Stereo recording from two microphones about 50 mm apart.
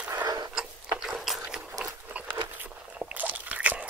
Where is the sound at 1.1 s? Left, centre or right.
Centre.